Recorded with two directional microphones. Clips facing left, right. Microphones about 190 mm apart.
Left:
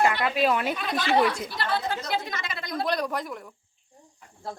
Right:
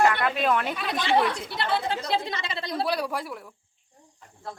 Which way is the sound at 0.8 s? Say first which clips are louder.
Even; 5° right (ahead or behind).